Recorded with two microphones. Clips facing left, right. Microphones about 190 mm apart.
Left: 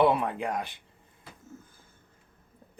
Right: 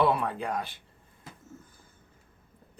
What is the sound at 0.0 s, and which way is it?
Speech, 20° left (ahead or behind).